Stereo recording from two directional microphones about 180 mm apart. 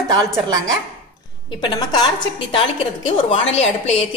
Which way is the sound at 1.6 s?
25° left (ahead or behind).